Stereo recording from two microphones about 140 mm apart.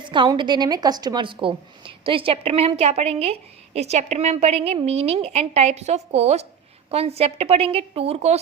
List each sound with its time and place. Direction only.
0.0 s a woman's voice: 35° right (ahead or behind)